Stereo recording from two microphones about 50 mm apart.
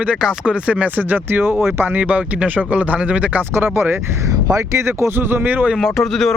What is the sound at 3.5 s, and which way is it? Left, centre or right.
Speech, right.